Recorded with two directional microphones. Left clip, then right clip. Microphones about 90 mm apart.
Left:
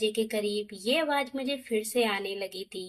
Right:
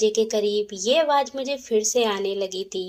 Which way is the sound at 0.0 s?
35° right (ahead or behind).